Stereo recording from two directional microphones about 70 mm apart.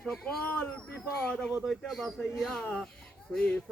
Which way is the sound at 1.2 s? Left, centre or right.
Centre.